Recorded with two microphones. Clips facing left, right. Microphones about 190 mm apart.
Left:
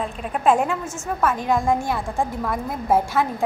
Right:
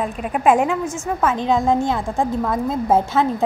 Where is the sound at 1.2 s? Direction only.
20° right (ahead or behind).